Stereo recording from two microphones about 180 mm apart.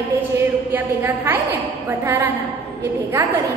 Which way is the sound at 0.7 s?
10° right (ahead or behind).